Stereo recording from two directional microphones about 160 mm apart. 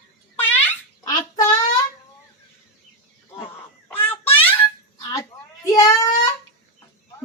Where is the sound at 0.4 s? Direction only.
10° left (ahead or behind).